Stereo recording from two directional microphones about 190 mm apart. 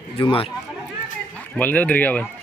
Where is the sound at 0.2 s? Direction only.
30° left (ahead or behind).